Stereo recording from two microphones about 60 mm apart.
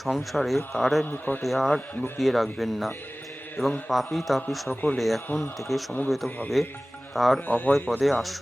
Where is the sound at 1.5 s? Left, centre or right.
Centre.